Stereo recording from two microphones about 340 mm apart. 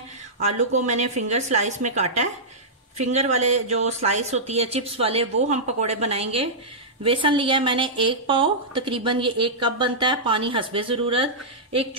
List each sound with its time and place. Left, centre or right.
0.7 s a woman's voice: right